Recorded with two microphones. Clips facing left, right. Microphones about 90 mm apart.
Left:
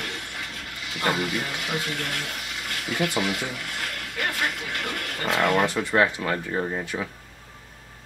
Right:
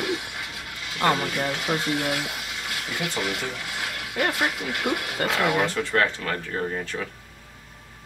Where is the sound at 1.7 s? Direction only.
10° right (ahead or behind).